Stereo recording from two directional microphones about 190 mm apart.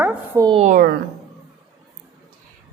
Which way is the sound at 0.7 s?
50° right (ahead or behind).